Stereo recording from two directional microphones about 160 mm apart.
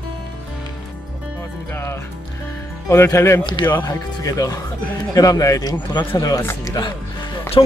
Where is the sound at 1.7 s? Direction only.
15° left (ahead or behind).